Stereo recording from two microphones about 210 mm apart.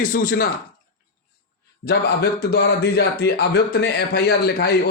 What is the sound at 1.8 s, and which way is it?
Speech, 50° left (ahead or behind).